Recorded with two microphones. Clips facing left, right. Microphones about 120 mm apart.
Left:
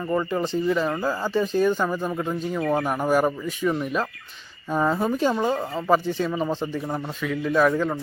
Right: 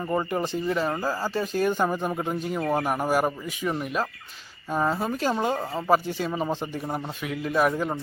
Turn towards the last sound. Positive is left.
turn(degrees=-15)  # may be behind; listen again after turning